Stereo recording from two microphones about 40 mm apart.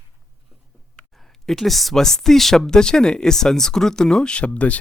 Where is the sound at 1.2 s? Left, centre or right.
Centre.